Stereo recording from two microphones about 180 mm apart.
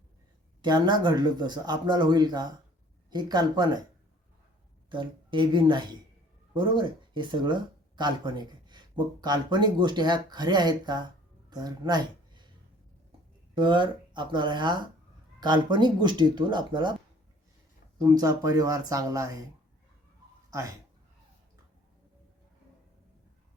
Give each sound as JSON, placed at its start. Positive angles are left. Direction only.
{"t": 0.6, "sound": "speech", "side_deg": -25}
{"t": 4.9, "sound": "speech", "side_deg": -25}
{"t": 13.6, "sound": "speech", "side_deg": -25}
{"t": 18.0, "sound": "speech", "side_deg": -20}
{"t": 20.5, "sound": "speech", "side_deg": -15}